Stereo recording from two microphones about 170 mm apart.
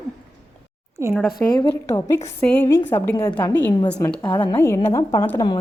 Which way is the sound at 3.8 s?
25° left (ahead or behind).